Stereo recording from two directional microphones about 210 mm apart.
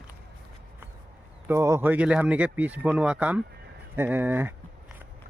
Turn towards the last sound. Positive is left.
turn(degrees=-10)  # may be behind; listen again after turning